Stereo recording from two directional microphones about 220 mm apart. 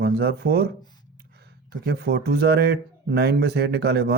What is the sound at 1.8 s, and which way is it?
Speech, 45° right (ahead or behind).